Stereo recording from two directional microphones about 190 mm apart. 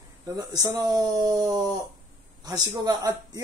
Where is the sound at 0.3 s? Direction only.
20° right (ahead or behind).